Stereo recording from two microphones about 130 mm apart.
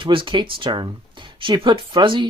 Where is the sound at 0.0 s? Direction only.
40° right (ahead or behind).